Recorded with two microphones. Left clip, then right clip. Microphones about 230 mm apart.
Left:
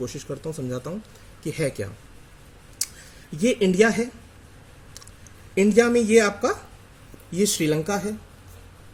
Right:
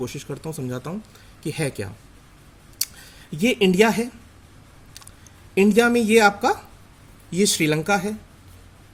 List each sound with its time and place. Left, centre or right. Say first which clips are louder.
0.0 s a man's voice: even; right
3.3 s a man's voice: right 1 dB; right
5.5 s a man's voice: right 1 dB; right